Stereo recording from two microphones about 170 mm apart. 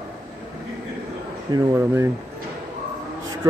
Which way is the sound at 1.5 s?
20° right (ahead or behind).